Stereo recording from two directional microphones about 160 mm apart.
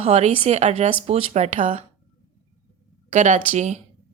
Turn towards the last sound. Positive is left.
turn(degrees=-45)  # may be behind; listen again after turning